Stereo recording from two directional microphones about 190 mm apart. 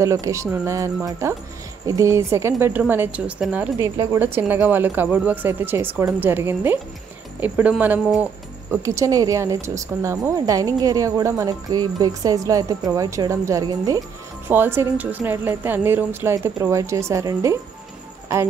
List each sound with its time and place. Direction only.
0.0 s a woman's voice: 15° right (ahead or behind)
3.9 s a woman's voice: 20° right (ahead or behind)
4.2 s a woman's voice: 10° right (ahead or behind)